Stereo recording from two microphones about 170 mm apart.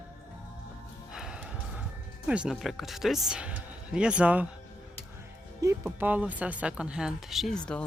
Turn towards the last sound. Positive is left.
turn(degrees=5)  # may be behind; listen again after turning